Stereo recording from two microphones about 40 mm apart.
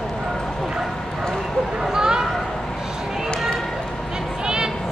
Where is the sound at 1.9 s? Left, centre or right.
Centre.